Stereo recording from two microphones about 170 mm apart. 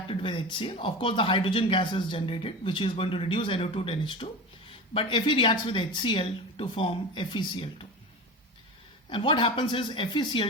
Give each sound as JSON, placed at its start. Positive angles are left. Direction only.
{"t": 0.1, "sound": "speech", "side_deg": 30}
{"t": 9.0, "sound": "speech", "side_deg": 30}